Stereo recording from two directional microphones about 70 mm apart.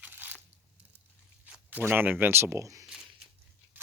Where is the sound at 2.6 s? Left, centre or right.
Right.